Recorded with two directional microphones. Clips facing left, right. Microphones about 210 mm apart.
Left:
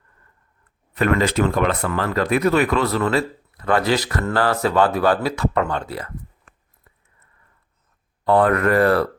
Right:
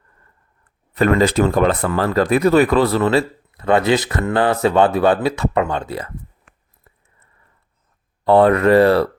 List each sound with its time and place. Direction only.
0.9 s speech: 35° right (ahead or behind)
8.2 s speech: 30° right (ahead or behind)